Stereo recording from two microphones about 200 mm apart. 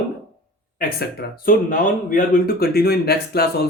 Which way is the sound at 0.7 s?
50° left (ahead or behind).